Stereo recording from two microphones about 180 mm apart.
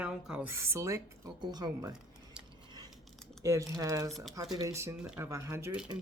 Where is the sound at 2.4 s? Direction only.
5° right (ahead or behind).